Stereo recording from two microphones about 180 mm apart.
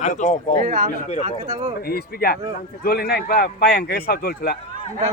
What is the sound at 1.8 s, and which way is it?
Speech, 55° left (ahead or behind).